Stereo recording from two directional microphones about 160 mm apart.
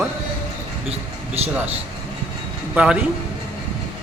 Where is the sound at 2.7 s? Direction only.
5° right (ahead or behind).